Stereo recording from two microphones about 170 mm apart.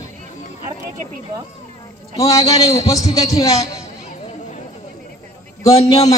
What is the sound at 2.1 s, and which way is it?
A man's voice, 20° left (ahead or behind).